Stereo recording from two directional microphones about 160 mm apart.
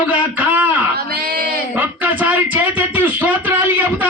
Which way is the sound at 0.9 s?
75° right (ahead or behind).